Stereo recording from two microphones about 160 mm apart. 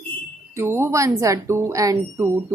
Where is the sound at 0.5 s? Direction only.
15° right (ahead or behind).